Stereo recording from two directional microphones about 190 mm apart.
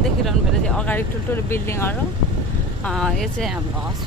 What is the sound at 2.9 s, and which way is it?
Speech, centre (ahead or behind).